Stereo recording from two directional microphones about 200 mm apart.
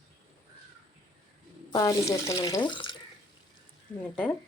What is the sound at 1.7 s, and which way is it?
Speech, 20° left (ahead or behind).